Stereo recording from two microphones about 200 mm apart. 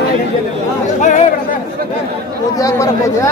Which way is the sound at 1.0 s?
40° left (ahead or behind).